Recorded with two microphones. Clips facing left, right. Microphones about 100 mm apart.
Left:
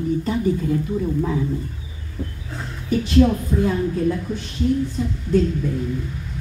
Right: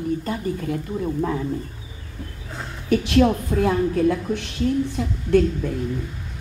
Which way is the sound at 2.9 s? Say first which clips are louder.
Left 1 dB; 70° right (ahead or behind).